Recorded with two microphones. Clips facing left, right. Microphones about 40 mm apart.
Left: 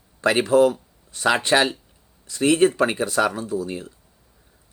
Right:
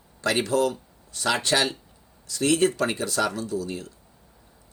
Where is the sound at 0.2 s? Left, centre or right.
Left.